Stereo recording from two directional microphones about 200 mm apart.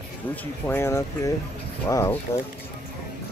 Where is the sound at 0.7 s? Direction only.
10° left (ahead or behind).